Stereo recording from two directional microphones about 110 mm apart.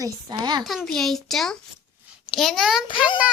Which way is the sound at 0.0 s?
40° right (ahead or behind).